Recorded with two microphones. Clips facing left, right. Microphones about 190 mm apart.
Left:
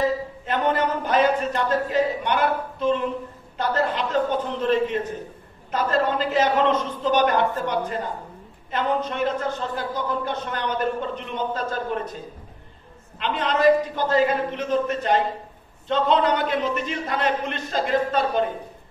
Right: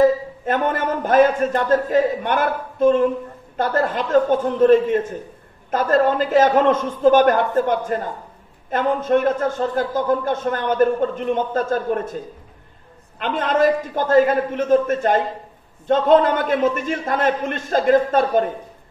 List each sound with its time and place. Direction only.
0.0 s a man's voice: 50° right (ahead or behind)
13.2 s a man's voice: 50° right (ahead or behind)